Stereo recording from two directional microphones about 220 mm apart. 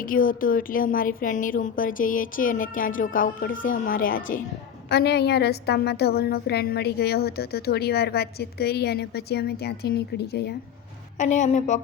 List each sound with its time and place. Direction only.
0.0 s a woman's voice: 40° left (ahead or behind)
11.2 s a woman's voice: 35° left (ahead or behind)